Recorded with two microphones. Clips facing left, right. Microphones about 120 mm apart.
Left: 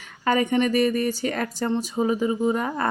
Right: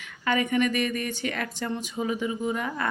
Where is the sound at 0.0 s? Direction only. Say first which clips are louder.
Left 4 dB; 35° left (ahead or behind).